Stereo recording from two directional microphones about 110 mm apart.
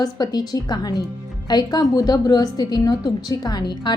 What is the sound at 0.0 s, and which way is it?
A woman's voice, 35° left (ahead or behind).